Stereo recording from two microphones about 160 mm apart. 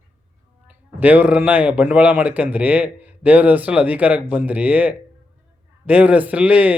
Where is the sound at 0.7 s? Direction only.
10° right (ahead or behind).